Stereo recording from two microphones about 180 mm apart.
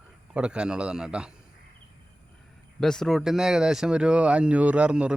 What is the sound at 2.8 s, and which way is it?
Speech, 5° left (ahead or behind).